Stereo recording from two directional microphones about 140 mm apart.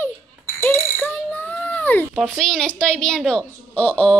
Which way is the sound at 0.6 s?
15° left (ahead or behind).